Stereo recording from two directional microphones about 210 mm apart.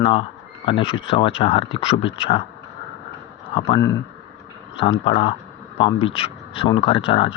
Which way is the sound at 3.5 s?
25° left (ahead or behind).